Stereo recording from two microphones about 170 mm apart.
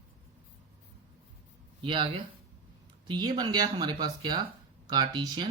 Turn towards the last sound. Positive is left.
turn(degrees=-25)  # may be behind; listen again after turning